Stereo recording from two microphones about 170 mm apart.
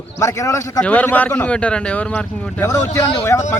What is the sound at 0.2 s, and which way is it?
Speech, 15° left (ahead or behind).